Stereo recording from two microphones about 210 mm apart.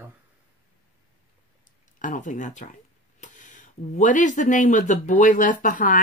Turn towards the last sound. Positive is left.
turn(degrees=40)  # may be behind; listen again after turning